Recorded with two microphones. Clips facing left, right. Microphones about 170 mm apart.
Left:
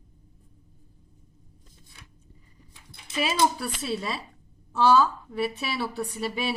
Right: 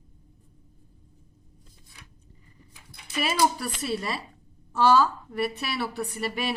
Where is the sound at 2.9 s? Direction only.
25° left (ahead or behind).